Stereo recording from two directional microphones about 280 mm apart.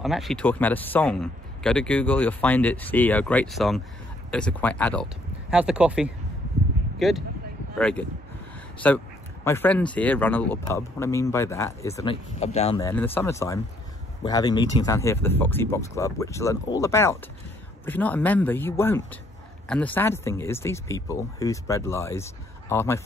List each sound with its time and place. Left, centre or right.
0.0 s speech: centre
8.8 s speech: centre